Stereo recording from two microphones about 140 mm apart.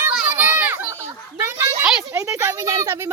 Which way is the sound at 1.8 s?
5° right (ahead or behind).